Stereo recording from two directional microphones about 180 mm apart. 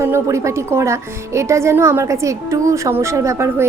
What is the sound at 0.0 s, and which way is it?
Speech, 15° right (ahead or behind).